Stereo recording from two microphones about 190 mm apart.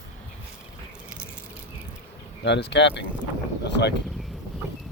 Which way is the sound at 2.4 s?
65° left (ahead or behind).